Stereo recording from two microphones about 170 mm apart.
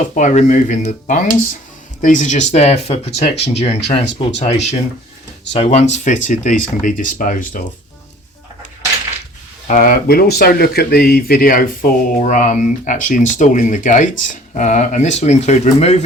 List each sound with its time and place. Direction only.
0.1 s speech: 45° left (ahead or behind)
9.6 s speech: 50° left (ahead or behind)